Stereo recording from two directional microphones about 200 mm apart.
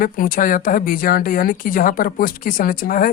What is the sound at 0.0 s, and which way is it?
A woman's voice, 45° left (ahead or behind).